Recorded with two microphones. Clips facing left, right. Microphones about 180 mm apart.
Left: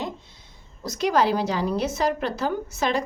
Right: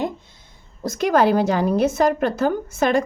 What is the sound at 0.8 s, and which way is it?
A woman's voice, 50° right (ahead or behind).